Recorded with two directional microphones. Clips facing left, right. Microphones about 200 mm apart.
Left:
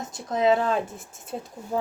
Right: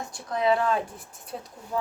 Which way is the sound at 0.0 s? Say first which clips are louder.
Left 3 dB; 20° left (ahead or behind).